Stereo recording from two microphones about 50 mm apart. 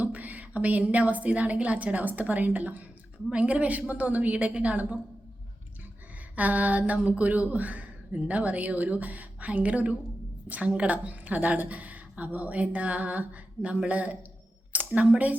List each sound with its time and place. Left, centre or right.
0.0 s a woman's voice: right
6.3 s speech: right
14.7 s a sound: right
15.1 s a woman's voice: right